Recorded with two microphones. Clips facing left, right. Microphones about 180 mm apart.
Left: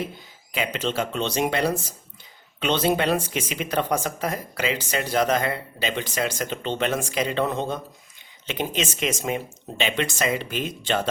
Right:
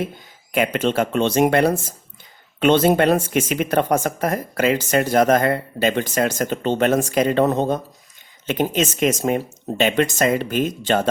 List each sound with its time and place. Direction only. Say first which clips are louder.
0.5 s speech: right 7 dB; 55° right (ahead or behind)